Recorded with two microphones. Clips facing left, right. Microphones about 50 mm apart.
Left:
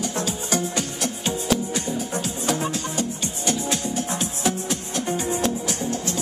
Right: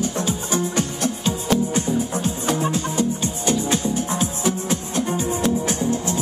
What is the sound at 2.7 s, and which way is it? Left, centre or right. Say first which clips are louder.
Music: right 5 dB; left.